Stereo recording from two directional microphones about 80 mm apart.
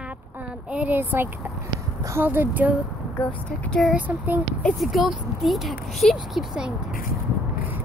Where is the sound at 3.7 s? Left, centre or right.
Centre.